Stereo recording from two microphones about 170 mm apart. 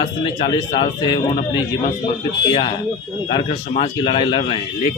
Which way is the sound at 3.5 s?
35° left (ahead or behind).